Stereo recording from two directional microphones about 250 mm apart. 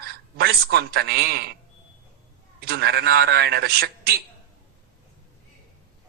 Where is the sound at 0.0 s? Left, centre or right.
Right.